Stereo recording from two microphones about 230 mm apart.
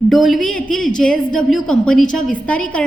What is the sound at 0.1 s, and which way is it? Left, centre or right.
A woman's voice, centre.